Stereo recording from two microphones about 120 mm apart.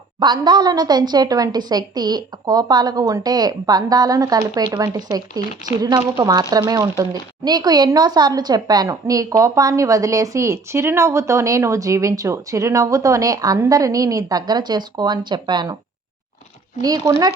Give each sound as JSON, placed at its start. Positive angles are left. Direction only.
{"t": 0.2, "sound": "a woman's voice", "side_deg": -35}
{"t": 16.8, "sound": "a woman's voice", "side_deg": -30}